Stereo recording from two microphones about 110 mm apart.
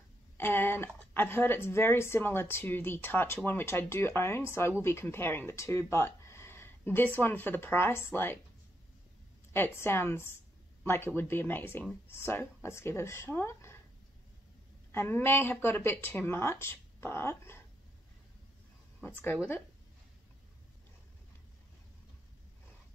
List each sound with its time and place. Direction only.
0.4 s speech: 20° left (ahead or behind)
9.5 s speech: 20° left (ahead or behind)
14.9 s speech: 20° left (ahead or behind)
19.0 s speech: 20° left (ahead or behind)